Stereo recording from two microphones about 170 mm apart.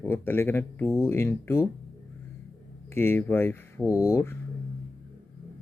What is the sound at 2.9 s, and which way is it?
Speech, 15° left (ahead or behind).